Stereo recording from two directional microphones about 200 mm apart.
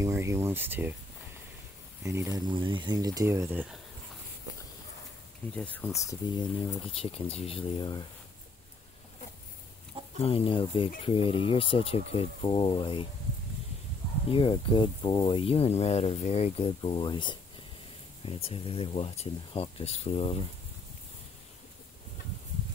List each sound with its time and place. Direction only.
0.0 s speech: 15° right (ahead or behind)
2.0 s speech: 15° right (ahead or behind)
5.6 s speech: 5° left (ahead or behind)
6.2 s speech: 25° left (ahead or behind)
10.2 s speech: 30° left (ahead or behind)
14.3 s speech: 25° left (ahead or behind)